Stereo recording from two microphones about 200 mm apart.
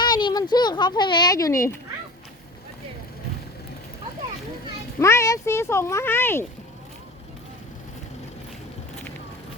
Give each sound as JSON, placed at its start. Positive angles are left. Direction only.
{"t": 0.0, "sound": "speech", "side_deg": 20}
{"t": 4.9, "sound": "speech", "side_deg": 15}